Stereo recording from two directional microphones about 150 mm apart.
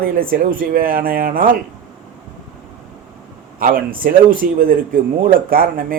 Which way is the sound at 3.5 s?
70° right (ahead or behind).